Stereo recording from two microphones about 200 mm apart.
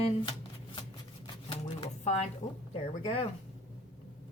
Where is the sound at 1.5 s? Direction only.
30° left (ahead or behind).